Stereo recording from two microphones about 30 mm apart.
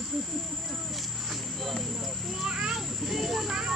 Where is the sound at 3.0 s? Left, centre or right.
Centre.